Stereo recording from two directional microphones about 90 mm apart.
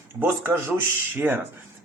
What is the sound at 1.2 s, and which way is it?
Speech, 20° right (ahead or behind).